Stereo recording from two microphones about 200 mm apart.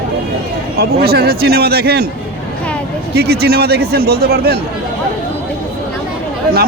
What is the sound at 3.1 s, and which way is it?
A man's voice, 50° right (ahead or behind).